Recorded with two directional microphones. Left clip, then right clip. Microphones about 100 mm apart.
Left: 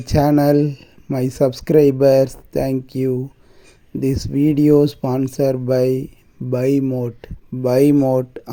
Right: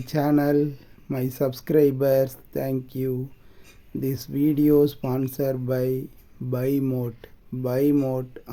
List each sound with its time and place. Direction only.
0.0 s speech: 55° left (ahead or behind)
6.5 s speech: 45° left (ahead or behind)
7.6 s speech: 75° left (ahead or behind)